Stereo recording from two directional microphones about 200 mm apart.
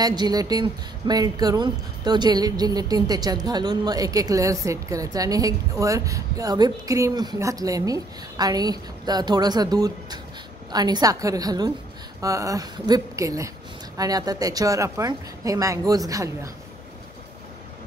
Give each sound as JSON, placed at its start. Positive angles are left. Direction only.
{"t": 0.0, "sound": "a woman's voice", "side_deg": -20}